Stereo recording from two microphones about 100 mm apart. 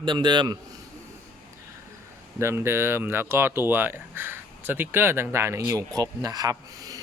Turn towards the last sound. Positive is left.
turn(degrees=-35)  # may be behind; listen again after turning